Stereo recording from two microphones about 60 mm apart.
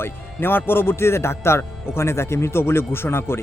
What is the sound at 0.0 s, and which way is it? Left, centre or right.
Speech, left.